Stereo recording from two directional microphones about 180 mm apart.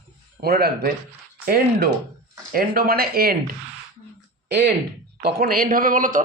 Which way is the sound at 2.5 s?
55° right (ahead or behind).